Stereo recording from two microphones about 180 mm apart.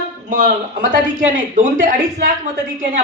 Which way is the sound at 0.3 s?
45° right (ahead or behind).